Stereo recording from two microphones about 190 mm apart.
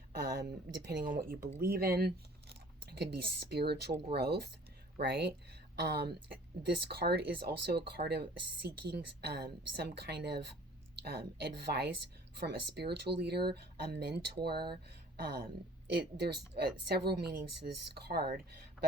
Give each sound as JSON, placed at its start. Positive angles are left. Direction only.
{"t": 0.1, "sound": "speech", "side_deg": -55}